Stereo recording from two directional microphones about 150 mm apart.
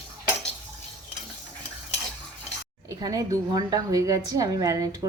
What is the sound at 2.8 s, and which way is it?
A woman's voice, 25° right (ahead or behind).